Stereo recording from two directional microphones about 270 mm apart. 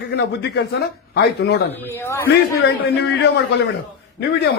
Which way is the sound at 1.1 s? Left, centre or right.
Left.